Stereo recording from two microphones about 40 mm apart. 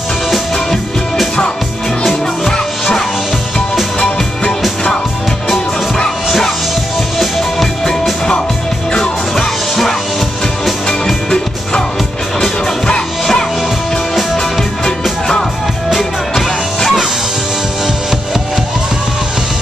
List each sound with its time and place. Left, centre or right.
8.9 s music: centre
12.8 s music: centre
15.9 s music: centre